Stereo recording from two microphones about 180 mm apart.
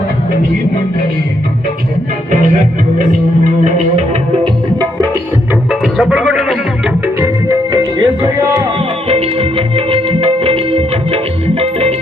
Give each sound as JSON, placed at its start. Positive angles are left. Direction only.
{"t": 3.6, "sound": "music", "side_deg": -40}
{"t": 5.8, "sound": "music", "side_deg": -5}
{"t": 7.2, "sound": "music", "side_deg": -20}
{"t": 9.0, "sound": "music", "side_deg": -35}